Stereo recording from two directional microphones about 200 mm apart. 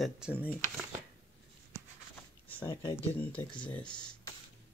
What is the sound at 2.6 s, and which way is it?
Speech, 20° left (ahead or behind).